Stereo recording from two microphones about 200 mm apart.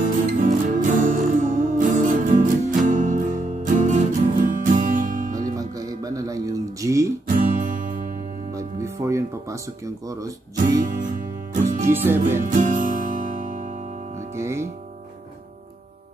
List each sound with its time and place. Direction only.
0.0 s music: 40° right (ahead or behind)
5.6 s music: 15° right (ahead or behind)
7.2 s music: 40° right (ahead or behind)
8.5 s music: 15° right (ahead or behind)
10.8 s music: 40° right (ahead or behind)
11.8 s music: 10° right (ahead or behind)
12.4 s music: 40° right (ahead or behind)
14.3 s music: 15° right (ahead or behind)